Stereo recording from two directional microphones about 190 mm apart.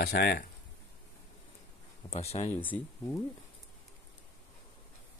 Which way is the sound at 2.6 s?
10° left (ahead or behind).